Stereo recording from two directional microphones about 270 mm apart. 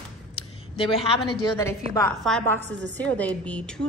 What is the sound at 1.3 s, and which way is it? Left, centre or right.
A woman's voice, centre.